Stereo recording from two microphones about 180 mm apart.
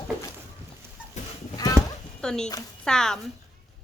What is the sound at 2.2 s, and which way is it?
Speech, 5° left (ahead or behind).